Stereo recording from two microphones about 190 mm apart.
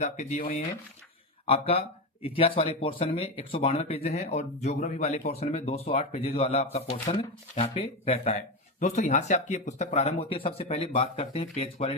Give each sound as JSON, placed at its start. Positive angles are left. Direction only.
{"t": 0.0, "sound": "speech", "side_deg": 35}